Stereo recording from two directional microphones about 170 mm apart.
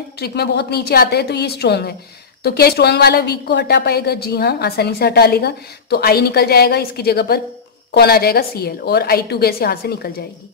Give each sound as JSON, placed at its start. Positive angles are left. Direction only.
{"t": 0.2, "sound": "a woman's voice", "side_deg": 70}